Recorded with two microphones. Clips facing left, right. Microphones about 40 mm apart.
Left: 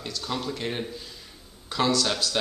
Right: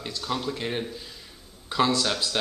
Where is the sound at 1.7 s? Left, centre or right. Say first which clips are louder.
Right 3 dB; centre.